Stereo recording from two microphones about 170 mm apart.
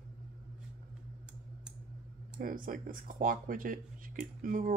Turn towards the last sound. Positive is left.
turn(degrees=-55)  # may be behind; listen again after turning